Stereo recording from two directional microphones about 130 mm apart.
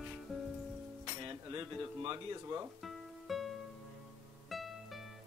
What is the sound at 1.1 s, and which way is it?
Chink, 35° right (ahead or behind).